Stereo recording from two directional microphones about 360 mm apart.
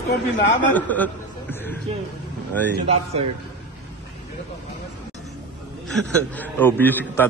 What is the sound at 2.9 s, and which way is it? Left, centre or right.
Speech, centre.